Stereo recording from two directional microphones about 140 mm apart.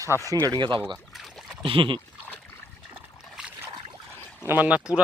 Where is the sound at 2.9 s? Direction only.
10° right (ahead or behind).